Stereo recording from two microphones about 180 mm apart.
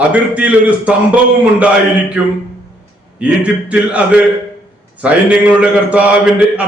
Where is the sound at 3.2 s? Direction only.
5° right (ahead or behind).